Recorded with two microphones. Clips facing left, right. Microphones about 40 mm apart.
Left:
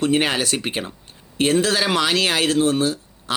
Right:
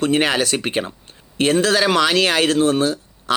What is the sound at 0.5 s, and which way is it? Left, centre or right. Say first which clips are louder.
Speech: right 3 dB; right.